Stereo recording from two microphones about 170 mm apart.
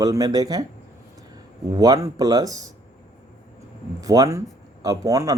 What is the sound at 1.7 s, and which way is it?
Speech, 20° right (ahead or behind).